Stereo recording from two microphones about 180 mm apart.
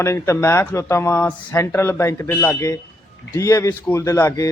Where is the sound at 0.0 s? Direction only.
15° left (ahead or behind).